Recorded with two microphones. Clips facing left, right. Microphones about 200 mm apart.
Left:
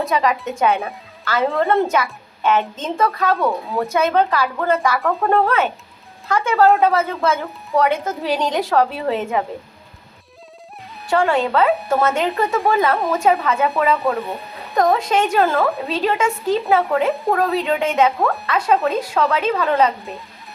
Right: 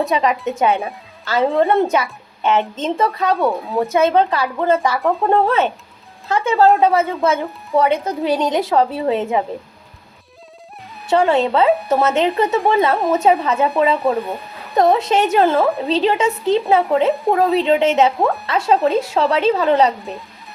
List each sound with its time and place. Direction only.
0.1 s a woman's voice: 20° right (ahead or behind)
11.1 s a woman's voice: 20° right (ahead or behind)
14.2 s a sound: centre (ahead or behind)
14.9 s a woman's voice: 20° right (ahead or behind)
17.4 s speech: centre (ahead or behind)
17.7 s a woman's voice: 25° right (ahead or behind)